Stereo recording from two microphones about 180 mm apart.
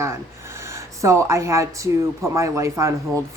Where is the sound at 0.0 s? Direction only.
15° right (ahead or behind).